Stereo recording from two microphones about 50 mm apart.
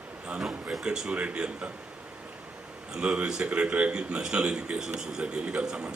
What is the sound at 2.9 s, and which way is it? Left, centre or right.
A man's voice, centre.